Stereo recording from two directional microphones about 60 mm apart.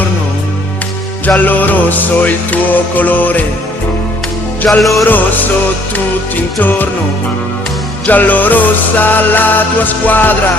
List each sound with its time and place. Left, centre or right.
1.4 s music: left
4.8 s music: centre
5.0 s music: left
6.6 s music: left
8.0 s music: left